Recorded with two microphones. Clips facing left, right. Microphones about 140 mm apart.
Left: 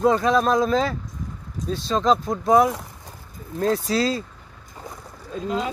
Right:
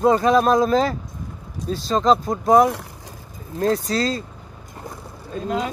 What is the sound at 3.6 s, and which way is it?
Speech, 5° left (ahead or behind).